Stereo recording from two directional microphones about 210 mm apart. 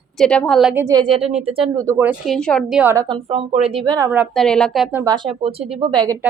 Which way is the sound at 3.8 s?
15° right (ahead or behind).